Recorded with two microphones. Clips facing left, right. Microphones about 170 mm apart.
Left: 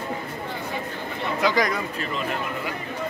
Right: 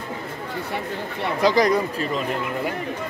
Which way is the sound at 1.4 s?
35° right (ahead or behind).